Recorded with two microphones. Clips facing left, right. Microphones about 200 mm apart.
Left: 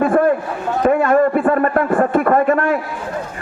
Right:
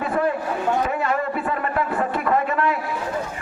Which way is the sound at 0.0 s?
50° left (ahead or behind).